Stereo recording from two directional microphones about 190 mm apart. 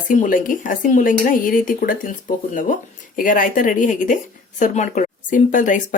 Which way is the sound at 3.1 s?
45° left (ahead or behind).